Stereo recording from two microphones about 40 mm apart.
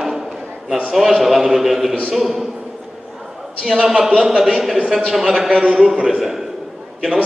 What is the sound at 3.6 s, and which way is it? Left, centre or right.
A man's voice, centre.